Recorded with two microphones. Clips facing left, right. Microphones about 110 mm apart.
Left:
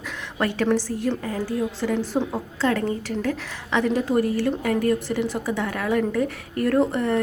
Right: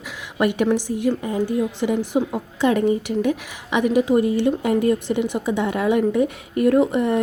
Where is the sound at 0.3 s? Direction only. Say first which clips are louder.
Right 3 dB; 15° right (ahead or behind).